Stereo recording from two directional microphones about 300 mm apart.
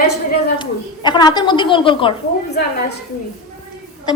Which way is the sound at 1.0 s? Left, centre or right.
Centre.